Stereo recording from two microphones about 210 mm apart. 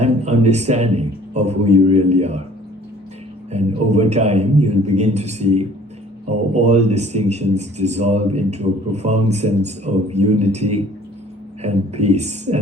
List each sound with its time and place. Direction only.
0.0 s speech: 30° right (ahead or behind)
3.5 s a man's voice: 30° right (ahead or behind)